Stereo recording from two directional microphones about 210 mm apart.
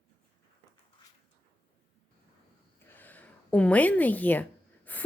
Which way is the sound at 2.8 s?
10° left (ahead or behind).